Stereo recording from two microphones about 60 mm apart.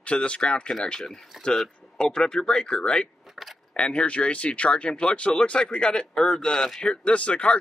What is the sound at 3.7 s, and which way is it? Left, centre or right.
Speech, left.